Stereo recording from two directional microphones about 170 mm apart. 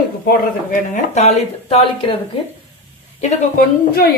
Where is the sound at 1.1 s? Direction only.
40° left (ahead or behind).